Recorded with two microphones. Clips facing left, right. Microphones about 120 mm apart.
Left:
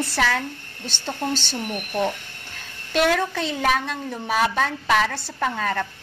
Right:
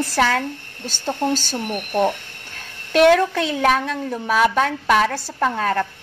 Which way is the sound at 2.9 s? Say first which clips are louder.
Right 7 dB; 55° right (ahead or behind).